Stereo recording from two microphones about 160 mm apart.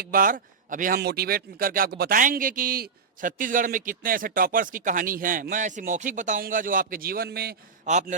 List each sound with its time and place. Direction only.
0.0 s a man's voice: 65° right (ahead or behind)
7.9 s a man's voice: 45° right (ahead or behind)